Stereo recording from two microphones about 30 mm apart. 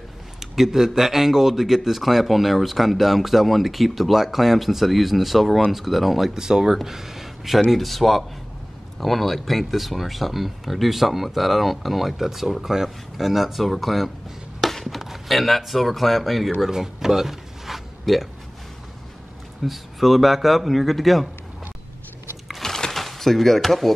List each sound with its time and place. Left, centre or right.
0.4 s speech: centre
6.3 s speech: centre
7.7 s speech: centre
14.7 s a sound: centre
15.0 s speech: centre
16.6 s speech: centre
19.6 s speech: centre
22.6 s a sound: centre